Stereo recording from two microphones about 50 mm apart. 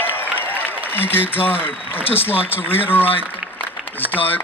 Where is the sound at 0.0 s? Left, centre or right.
Left.